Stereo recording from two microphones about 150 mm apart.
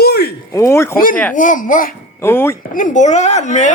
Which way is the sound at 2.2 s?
15° left (ahead or behind).